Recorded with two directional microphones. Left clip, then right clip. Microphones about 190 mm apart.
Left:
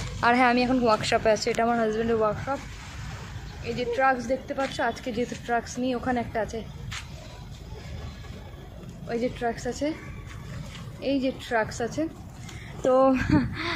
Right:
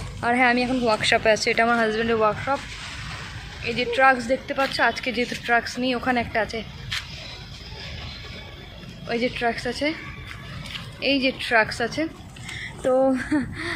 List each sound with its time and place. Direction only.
0.2 s a woman's voice: centre (ahead or behind)
2.1 s speech: 15° right (ahead or behind)
3.6 s speech: 20° right (ahead or behind)
4.7 s a woman's voice: centre (ahead or behind)
5.9 s speech: 15° right (ahead or behind)
6.3 s speech: centre (ahead or behind)
9.0 s speech: 15° right (ahead or behind)
9.6 s a woman's voice: centre (ahead or behind)
11.0 s a woman's voice: 5° right (ahead or behind)